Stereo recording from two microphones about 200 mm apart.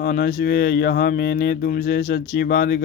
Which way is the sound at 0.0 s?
50° left (ahead or behind).